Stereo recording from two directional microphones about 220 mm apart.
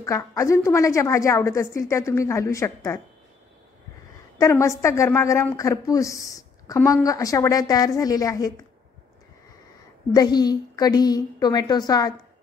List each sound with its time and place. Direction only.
0.0 s a woman's voice: 15° left (ahead or behind)
4.4 s a woman's voice: 15° left (ahead or behind)
10.1 s a woman's voice: 20° left (ahead or behind)